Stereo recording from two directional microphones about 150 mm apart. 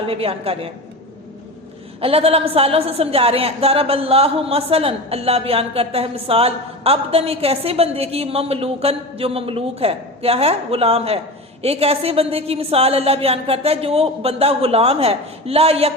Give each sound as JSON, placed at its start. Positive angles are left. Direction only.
{"t": 0.1, "sound": "a woman's voice", "side_deg": -40}
{"t": 2.0, "sound": "a woman's voice", "side_deg": -40}